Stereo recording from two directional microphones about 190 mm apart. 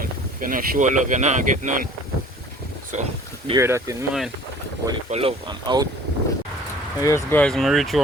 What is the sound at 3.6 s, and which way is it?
Speech, 15° right (ahead or behind).